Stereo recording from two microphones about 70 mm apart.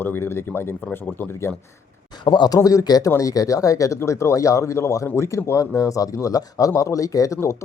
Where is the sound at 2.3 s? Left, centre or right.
Left.